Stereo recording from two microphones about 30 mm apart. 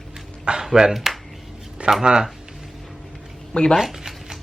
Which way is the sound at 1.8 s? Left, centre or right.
Right.